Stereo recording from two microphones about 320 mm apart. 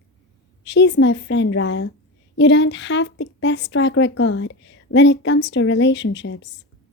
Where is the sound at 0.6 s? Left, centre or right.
Left.